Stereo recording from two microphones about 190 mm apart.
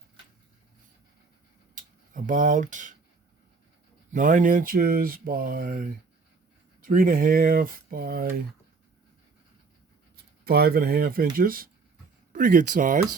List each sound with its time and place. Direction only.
1.7 s speech: 45° right (ahead or behind)
4.1 s speech: 45° right (ahead or behind)
10.4 s speech: 55° right (ahead or behind)